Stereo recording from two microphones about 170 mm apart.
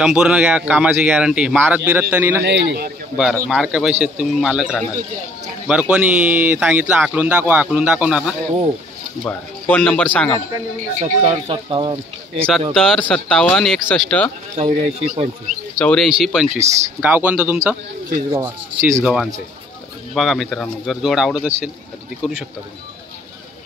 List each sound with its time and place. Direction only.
0.0 s speech: 5° right (ahead or behind)
2.4 s speech: 75° right (ahead or behind)
3.2 s speech: centre (ahead or behind)
9.2 s speech: 10° left (ahead or behind)
11.0 s speech: 40° right (ahead or behind)
11.5 s speech: 30° right (ahead or behind)
12.7 s speech: 5° left (ahead or behind)
14.6 s speech: 40° right (ahead or behind)
15.8 s speech: 5° left (ahead or behind)
16.5 s speech: 40° right (ahead or behind)
17.0 s speech: 10° right (ahead or behind)
18.1 s speech: 20° right (ahead or behind)
20.2 s speech: centre (ahead or behind)